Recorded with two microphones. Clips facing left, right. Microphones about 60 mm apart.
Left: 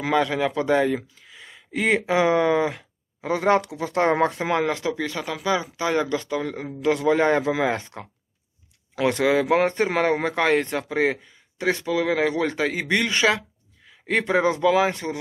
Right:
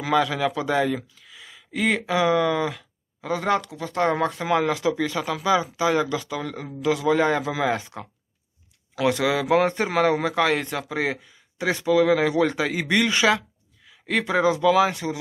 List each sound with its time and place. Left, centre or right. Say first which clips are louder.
0.0 s speech: even; centre
4.3 s speech: right 1 dB; centre
5.2 s speech: right 2 dB; centre
6.2 s speech: left 3 dB; centre
7.8 s speech: right 1 dB; centre
11.9 s speech: right 5 dB; centre
13.1 s speech: even; centre
14.1 s speech: even; centre
14.9 s speech: even; centre